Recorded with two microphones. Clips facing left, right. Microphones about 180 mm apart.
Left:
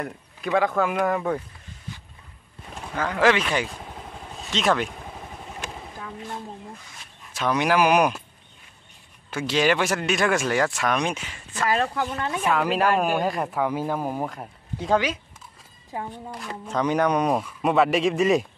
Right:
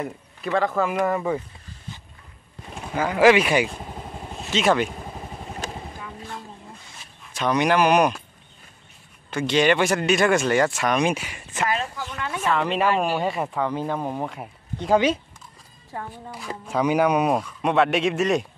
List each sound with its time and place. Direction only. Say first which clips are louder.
0.0 s speech: right 1 dB; 5° left (ahead or behind)
2.7 s speech: right 3 dB; 10° right (ahead or behind)
7.3 s speech: right 1 dB; 5° left (ahead or behind)
9.3 s speech: right 2 dB; 5° left (ahead or behind); by 11.7 s 15° right (ahead or behind)
11.8 s speech: left 6 dB; 60° left (ahead or behind)
12.3 s speech: right 2 dB; 15° left (ahead or behind)
12.5 s speech: even; 5° left (ahead or behind)
16.1 s speech: even; 5° right (ahead or behind)
17.4 s speech: even; 5° left (ahead or behind)